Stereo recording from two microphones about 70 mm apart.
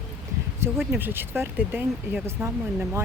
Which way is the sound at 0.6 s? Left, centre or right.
Right.